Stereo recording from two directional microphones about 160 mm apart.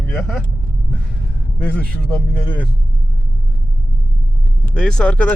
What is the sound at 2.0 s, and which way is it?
Speech, 10° left (ahead or behind).